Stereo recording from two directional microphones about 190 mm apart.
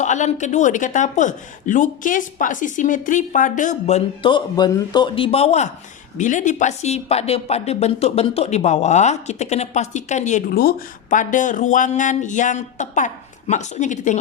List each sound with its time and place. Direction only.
0.0 s speech: 40° left (ahead or behind)